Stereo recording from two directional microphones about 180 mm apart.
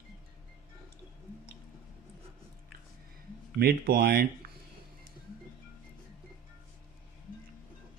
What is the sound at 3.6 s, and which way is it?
Speech, 60° right (ahead or behind).